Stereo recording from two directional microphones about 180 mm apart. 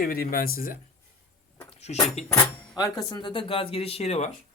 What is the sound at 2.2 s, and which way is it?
Speech, 40° left (ahead or behind).